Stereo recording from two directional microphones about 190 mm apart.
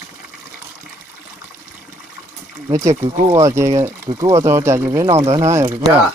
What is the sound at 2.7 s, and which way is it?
Speech, 15° right (ahead or behind).